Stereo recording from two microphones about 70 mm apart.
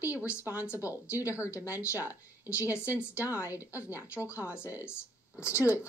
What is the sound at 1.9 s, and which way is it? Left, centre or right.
Speech, right.